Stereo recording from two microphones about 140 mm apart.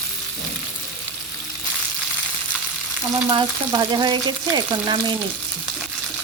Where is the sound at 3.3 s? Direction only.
30° right (ahead or behind).